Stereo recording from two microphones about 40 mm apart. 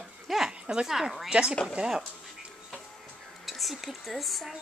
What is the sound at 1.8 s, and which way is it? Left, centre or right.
Dishes, right.